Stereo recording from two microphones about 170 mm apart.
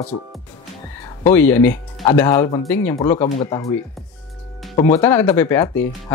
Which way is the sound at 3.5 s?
20° left (ahead or behind).